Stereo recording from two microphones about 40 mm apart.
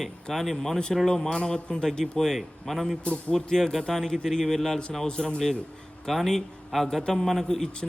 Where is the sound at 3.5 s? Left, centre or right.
Centre.